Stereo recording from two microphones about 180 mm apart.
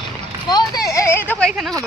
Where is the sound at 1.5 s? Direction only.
Centre (ahead or behind).